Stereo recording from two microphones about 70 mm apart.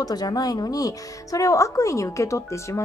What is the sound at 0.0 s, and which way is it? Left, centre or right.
A woman's voice, left.